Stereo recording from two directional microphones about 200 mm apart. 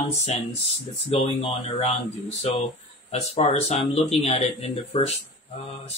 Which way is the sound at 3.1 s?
35° left (ahead or behind).